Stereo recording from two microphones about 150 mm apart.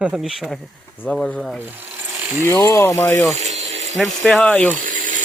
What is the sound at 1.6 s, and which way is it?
Mechanisms, 10° right (ahead or behind).